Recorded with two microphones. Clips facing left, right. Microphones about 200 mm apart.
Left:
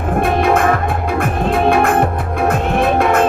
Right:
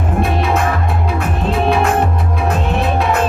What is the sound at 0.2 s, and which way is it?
Music, 50° left (ahead or behind).